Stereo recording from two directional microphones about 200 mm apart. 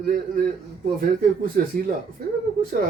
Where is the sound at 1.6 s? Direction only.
45° right (ahead or behind).